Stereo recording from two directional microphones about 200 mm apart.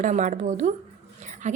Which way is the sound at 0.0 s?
40° right (ahead or behind).